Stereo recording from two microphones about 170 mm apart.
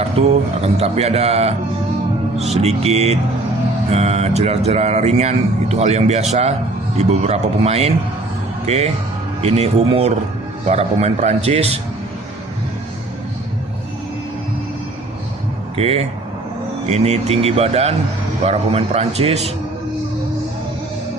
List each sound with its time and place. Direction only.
0.2 s speech: 40° right (ahead or behind)
2.6 s speech: 40° right (ahead or behind)
15.8 s speech: 35° right (ahead or behind)